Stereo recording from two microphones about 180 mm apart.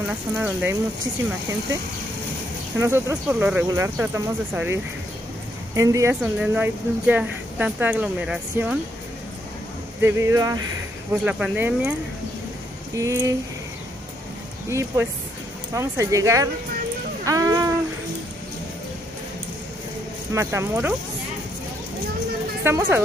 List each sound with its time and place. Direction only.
0.1 s a woman's voice: 10° right (ahead or behind)
2.8 s a woman's voice: 15° right (ahead or behind)
5.8 s a woman's voice: 15° right (ahead or behind)
10.0 s a woman's voice: 15° right (ahead or behind)
11.2 s a woman's voice: 5° right (ahead or behind)
12.9 s a woman's voice: 20° right (ahead or behind)
14.7 s a woman's voice: 15° right (ahead or behind)
17.2 s music: 20° right (ahead or behind)
20.3 s a woman's voice: 15° right (ahead or behind)
22.6 s a woman's voice: 15° right (ahead or behind)